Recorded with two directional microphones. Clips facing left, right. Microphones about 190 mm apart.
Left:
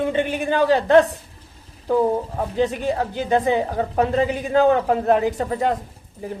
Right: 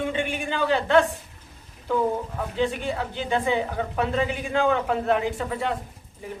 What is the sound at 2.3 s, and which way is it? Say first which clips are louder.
A woman's voice: left 4 dB; 40° left (ahead or behind).